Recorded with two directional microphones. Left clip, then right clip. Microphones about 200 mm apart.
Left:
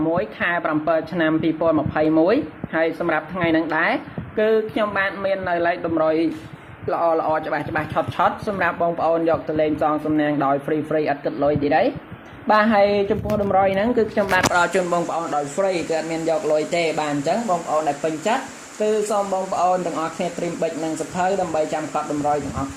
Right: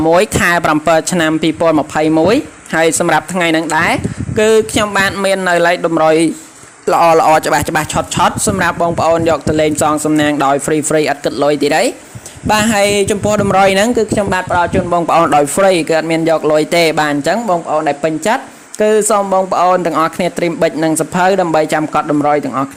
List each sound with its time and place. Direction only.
0.1 s speech: 75° right (ahead or behind); by 2.4 s 55° right (ahead or behind)
2.7 s speech: 70° right (ahead or behind)
6.8 s speech: 90° right
7.9 s speech: 55° right (ahead or behind); by 13.8 s 85° right
13.9 s speech: 45° right (ahead or behind)
14.5 s speech: 25° right (ahead or behind)
14.9 s speech: 45° right (ahead or behind); by 22.4 s 60° right (ahead or behind)